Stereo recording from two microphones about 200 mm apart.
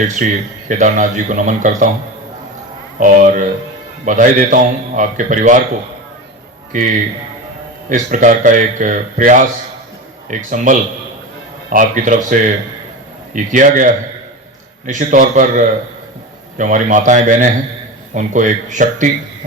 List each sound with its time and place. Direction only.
0.2 s a man's voice: 40° right (ahead or behind)
3.0 s a man's voice: 40° right (ahead or behind)
7.9 s a man's voice: 40° right (ahead or behind)